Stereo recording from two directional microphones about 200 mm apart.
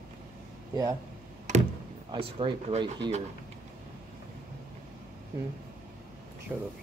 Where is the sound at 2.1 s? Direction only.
25° right (ahead or behind).